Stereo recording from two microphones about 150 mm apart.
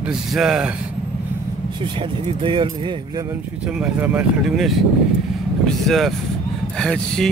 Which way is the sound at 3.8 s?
10° right (ahead or behind).